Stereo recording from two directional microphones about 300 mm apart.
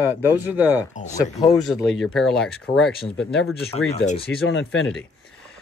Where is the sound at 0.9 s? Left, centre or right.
Left.